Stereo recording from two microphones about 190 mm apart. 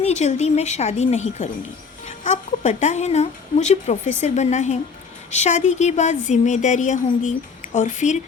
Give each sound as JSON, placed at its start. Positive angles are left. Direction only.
{"t": 0.0, "sound": "speech", "side_deg": 35}